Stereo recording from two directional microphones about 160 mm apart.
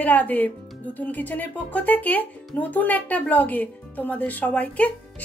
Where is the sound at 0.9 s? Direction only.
10° left (ahead or behind).